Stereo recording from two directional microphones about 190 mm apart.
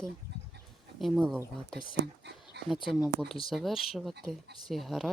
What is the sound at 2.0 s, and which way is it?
Speech, 65° right (ahead or behind).